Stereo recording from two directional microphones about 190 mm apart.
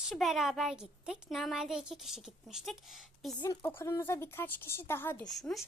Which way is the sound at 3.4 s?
15° left (ahead or behind).